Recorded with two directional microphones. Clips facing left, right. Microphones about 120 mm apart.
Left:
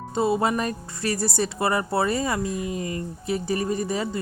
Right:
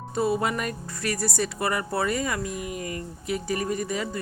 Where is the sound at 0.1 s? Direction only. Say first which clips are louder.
Left 3 dB; 25° left (ahead or behind).